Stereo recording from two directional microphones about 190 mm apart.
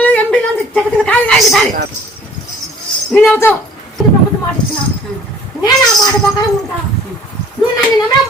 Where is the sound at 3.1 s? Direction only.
10° left (ahead or behind).